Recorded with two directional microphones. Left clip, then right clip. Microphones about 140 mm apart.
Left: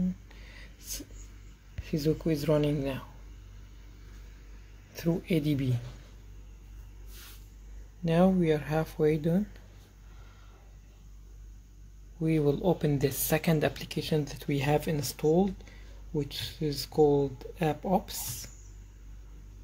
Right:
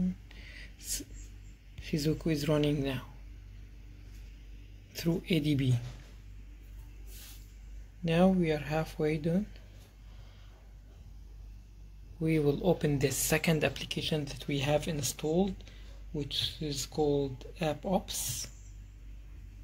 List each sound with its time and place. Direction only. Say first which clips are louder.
0.3 s a sound: right 1 dB; 10° left (ahead or behind)
1.9 s speech: left 3 dB; 5° left (ahead or behind)
4.9 s speech: left 2 dB; 5° left (ahead or behind)
8.0 s speech: left 2 dB; 15° left (ahead or behind)
12.2 s speech: left 2 dB; 15° left (ahead or behind)